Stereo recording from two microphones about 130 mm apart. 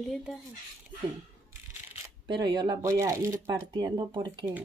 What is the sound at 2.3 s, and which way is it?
Speech, 35° right (ahead or behind).